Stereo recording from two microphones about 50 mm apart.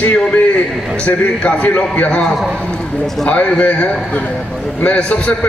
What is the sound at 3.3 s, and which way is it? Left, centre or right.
A man's voice, left.